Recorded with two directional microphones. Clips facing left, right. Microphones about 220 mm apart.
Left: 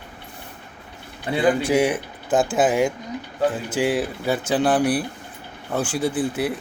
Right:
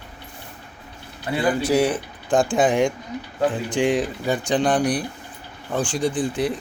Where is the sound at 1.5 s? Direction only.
10° left (ahead or behind).